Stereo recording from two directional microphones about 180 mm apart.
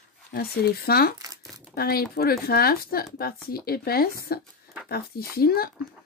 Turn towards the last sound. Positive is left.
turn(degrees=60)  # may be behind; listen again after turning